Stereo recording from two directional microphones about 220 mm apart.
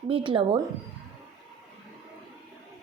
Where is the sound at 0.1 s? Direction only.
25° right (ahead or behind).